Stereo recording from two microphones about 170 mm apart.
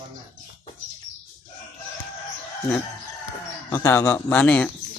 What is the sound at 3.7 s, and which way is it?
A man's voice, 15° left (ahead or behind).